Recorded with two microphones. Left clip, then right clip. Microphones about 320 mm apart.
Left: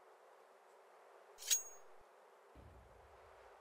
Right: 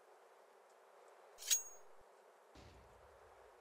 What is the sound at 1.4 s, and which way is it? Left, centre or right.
Bicycle bell, centre.